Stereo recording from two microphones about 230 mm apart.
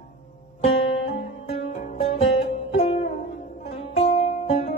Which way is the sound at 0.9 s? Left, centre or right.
Left.